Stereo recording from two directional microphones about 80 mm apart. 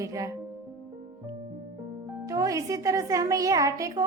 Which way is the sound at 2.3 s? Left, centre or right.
Right.